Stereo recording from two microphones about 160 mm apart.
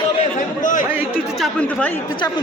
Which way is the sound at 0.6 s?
55° left (ahead or behind).